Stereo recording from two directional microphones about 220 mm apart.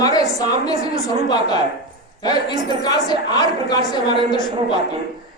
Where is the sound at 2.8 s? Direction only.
20° left (ahead or behind).